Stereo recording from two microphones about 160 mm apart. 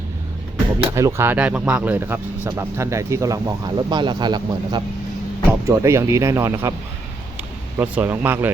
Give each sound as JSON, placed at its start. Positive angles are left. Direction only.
{"t": 0.9, "sound": "speech", "side_deg": -15}
{"t": 5.5, "sound": "speech", "side_deg": -15}
{"t": 7.8, "sound": "speech", "side_deg": -10}